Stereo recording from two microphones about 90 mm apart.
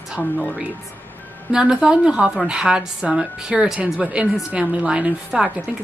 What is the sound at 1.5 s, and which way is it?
A woman's voice, 10° right (ahead or behind).